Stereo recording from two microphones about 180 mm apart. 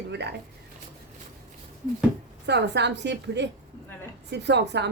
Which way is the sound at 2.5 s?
70° right (ahead or behind).